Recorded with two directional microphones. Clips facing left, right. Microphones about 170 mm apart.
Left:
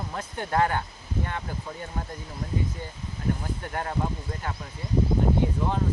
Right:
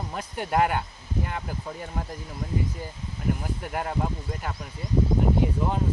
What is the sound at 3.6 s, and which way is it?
Speech, 10° right (ahead or behind).